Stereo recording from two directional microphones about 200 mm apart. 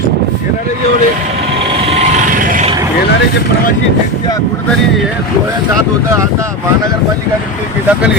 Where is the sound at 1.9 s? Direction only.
35° right (ahead or behind).